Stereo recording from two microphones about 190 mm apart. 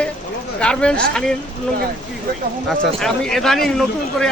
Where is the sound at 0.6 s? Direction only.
5° left (ahead or behind).